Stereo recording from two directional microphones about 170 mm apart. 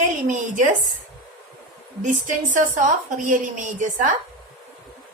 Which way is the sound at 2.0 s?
50° right (ahead or behind).